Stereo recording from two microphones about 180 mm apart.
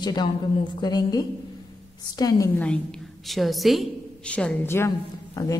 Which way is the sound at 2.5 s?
5° left (ahead or behind).